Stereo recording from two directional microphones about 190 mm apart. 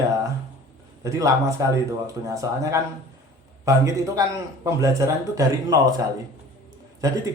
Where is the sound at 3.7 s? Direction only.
15° right (ahead or behind).